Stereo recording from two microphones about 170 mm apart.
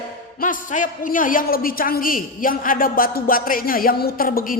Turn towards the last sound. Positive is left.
turn(degrees=60)  # may be behind; listen again after turning